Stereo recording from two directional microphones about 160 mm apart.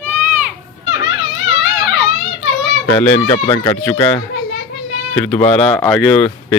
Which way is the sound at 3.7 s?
15° left (ahead or behind).